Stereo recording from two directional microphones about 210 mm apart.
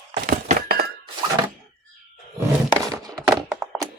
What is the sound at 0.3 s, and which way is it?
Thunk, 45° right (ahead or behind).